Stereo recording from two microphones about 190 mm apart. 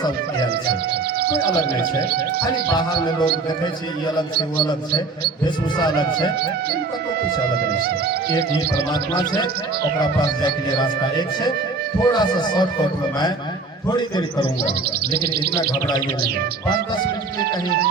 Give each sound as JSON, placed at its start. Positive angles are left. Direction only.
{"t": 1.2, "sound": "music", "side_deg": -55}
{"t": 2.6, "sound": "speech", "side_deg": 20}
{"t": 5.8, "sound": "speech", "side_deg": 20}
{"t": 7.9, "sound": "music", "side_deg": -55}
{"t": 10.4, "sound": "speech", "side_deg": 20}
{"t": 13.8, "sound": "speech", "side_deg": 20}